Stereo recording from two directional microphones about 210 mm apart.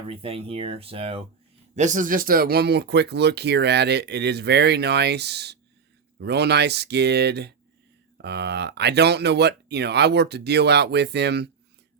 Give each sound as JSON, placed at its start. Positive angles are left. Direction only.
{"t": 0.1, "sound": "speech", "side_deg": -25}